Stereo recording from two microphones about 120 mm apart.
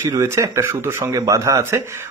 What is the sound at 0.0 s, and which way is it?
A man's voice, 25° right (ahead or behind).